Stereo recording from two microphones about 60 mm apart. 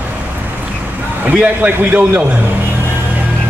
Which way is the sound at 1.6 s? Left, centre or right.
Right.